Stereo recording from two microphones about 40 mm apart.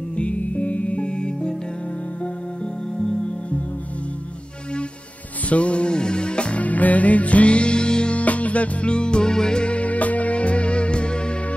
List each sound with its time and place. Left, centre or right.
0.1 s music: left
5.5 s music: left
6.6 s music: left